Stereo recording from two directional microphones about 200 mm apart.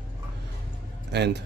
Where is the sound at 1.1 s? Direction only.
55° right (ahead or behind).